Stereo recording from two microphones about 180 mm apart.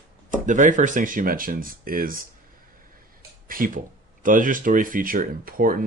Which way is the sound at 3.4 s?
50° right (ahead or behind).